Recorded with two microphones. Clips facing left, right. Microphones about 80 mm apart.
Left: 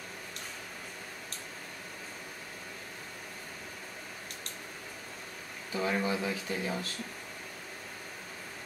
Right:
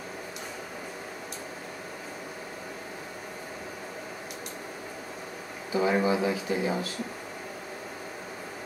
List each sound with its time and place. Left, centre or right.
5.7 s speech: centre